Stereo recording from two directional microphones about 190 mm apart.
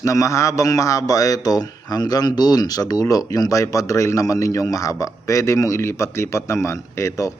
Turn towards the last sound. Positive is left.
turn(degrees=15)  # may be behind; listen again after turning